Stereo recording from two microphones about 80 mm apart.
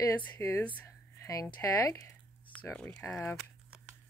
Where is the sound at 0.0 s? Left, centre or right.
Left.